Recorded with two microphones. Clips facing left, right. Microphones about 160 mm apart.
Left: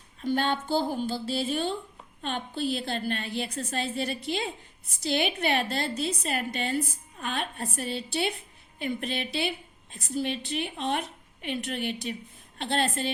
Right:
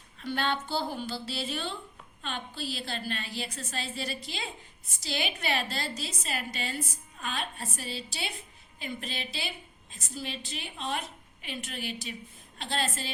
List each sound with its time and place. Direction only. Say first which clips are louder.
0.2 s a woman's voice: left 4 dB; 45° left (ahead or behind)